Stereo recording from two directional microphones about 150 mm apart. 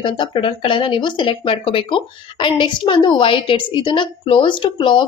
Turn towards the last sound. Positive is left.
turn(degrees=35)  # may be behind; listen again after turning